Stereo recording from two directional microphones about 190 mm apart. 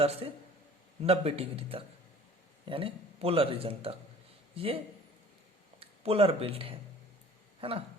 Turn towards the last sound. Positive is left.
turn(degrees=-30)  # may be behind; listen again after turning